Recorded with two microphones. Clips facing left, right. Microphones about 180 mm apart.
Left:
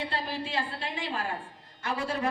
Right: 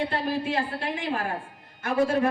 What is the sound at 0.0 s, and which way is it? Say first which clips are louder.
A woman's voice: right 6 dB; 55° right (ahead or behind).